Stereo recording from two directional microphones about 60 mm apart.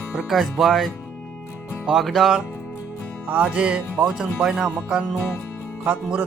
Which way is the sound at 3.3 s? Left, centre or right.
Centre.